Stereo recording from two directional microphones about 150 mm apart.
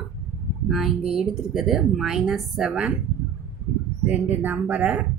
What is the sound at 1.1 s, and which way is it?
Speech, centre (ahead or behind).